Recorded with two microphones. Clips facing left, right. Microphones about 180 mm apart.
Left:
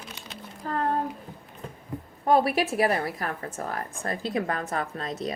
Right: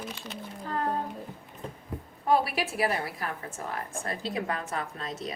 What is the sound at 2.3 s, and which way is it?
A woman's voice, 45° left (ahead or behind).